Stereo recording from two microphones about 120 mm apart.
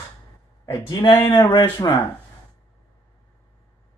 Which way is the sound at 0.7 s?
40° left (ahead or behind).